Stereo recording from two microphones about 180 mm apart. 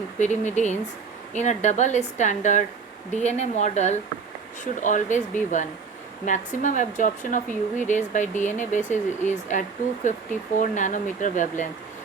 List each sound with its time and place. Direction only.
0.2 s a woman's voice: 40° left (ahead or behind)